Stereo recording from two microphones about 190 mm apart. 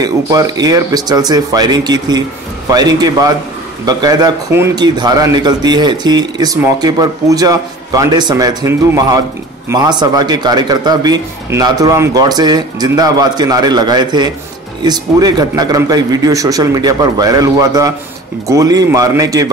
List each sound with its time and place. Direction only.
0.0 s a man's voice: 20° right (ahead or behind)